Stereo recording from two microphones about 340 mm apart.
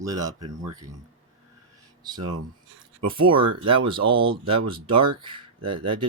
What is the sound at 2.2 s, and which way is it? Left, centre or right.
Speech, right.